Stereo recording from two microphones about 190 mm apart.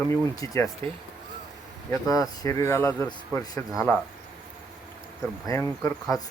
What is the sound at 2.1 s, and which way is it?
Speech, 15° left (ahead or behind).